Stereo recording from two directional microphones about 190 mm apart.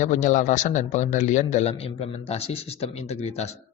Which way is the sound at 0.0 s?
40° left (ahead or behind).